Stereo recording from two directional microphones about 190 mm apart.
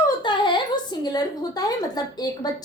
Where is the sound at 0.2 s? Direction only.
25° left (ahead or behind).